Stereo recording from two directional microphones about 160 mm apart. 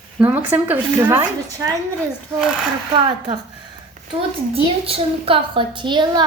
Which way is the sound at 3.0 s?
30° right (ahead or behind).